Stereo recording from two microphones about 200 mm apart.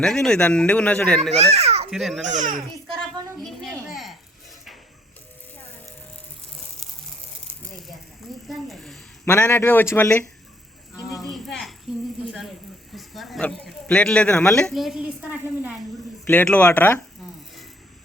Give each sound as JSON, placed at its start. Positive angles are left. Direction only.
{"t": 0.0, "sound": "a man's voice", "side_deg": 5}
{"t": 1.3, "sound": "a child's voice", "side_deg": -30}
{"t": 1.9, "sound": "a man's voice", "side_deg": 0}
{"t": 2.3, "sound": "a child's voice", "side_deg": -40}
{"t": 3.4, "sound": "a sound", "side_deg": 0}
{"t": 7.7, "sound": "a sound", "side_deg": 0}
{"t": 9.2, "sound": "a man's voice", "side_deg": 15}
{"t": 11.3, "sound": "a sound", "side_deg": 0}
{"t": 12.3, "sound": "a man's voice", "side_deg": 0}
{"t": 16.2, "sound": "a man's voice", "side_deg": 10}